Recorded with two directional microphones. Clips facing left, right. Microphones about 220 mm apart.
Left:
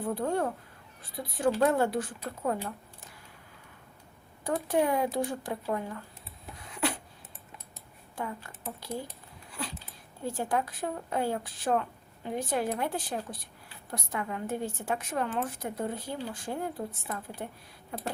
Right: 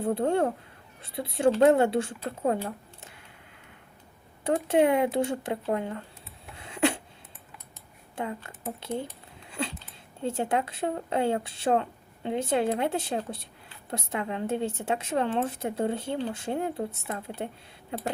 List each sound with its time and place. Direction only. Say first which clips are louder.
0.0 s speech: right 5 dB; 25° right (ahead or behind)
4.4 s speech: right 5 dB; 25° right (ahead or behind)
6.6 s a sound: right 6 dB; 25° right (ahead or behind)
8.1 s speech: right 3 dB; 25° right (ahead or behind)
9.5 s a sound: right 6 dB; 25° right (ahead or behind)
10.2 s speech: right 3 dB; 25° right (ahead or behind)